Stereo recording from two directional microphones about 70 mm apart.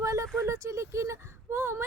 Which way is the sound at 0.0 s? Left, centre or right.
Right.